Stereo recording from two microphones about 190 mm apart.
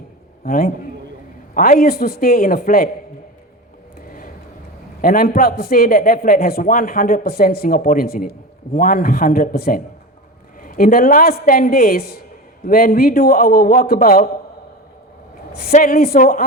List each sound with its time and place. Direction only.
0.4 s a man's voice: 50° left (ahead or behind)
4.0 s vehicle: 45° left (ahead or behind)
4.9 s a man's voice: 50° left (ahead or behind)
15.5 s a man's voice: 50° left (ahead or behind)